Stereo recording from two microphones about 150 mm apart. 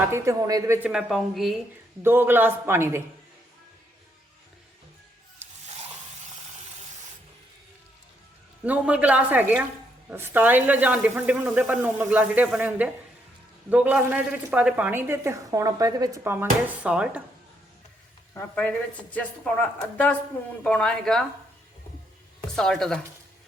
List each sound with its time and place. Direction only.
0.1 s speech: 20° right (ahead or behind)
0.8 s a woman's voice: 5° right (ahead or behind)
2.0 s a woman's voice: 15° right (ahead or behind)
8.6 s a woman's voice: 10° right (ahead or behind)
18.3 s a woman's voice: 10° left (ahead or behind)
20.7 s a woman's voice: 5° left (ahead or behind)
22.5 s a woman's voice: 5° left (ahead or behind)